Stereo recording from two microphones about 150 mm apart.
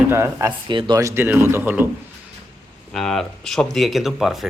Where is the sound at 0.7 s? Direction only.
30° right (ahead or behind).